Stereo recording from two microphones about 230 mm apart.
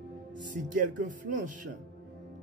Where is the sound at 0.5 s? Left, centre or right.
Right.